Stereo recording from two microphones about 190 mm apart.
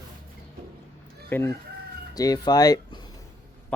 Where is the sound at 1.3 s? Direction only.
10° left (ahead or behind).